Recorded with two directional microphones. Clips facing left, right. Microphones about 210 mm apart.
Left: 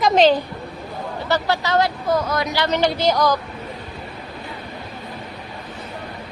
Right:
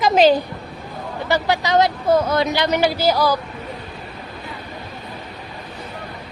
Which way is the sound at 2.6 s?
10° right (ahead or behind).